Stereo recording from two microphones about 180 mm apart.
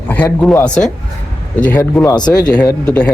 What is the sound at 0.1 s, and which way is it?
A man's voice, 10° left (ahead or behind).